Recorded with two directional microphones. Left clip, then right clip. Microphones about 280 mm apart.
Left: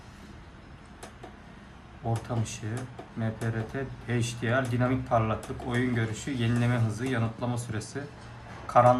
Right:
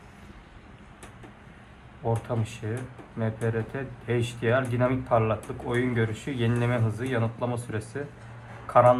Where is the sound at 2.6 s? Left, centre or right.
Centre.